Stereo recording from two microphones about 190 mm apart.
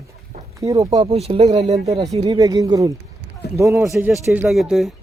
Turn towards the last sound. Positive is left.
turn(degrees=0)  # may be behind; listen again after turning